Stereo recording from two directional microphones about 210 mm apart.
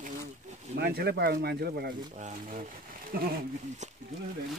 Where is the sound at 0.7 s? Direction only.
50° right (ahead or behind).